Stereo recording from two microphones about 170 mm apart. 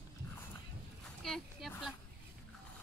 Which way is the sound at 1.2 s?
Centre (ahead or behind).